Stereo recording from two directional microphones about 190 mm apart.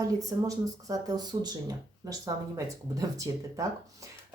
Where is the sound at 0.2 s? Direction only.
20° right (ahead or behind).